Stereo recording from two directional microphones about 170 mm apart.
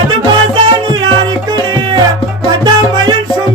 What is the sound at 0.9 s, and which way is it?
Music, 25° right (ahead or behind).